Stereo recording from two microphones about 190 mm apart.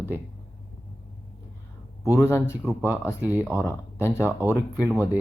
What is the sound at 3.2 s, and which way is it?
Speech, 10° right (ahead or behind).